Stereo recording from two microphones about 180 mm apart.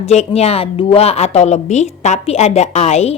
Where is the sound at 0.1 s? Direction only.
35° left (ahead or behind).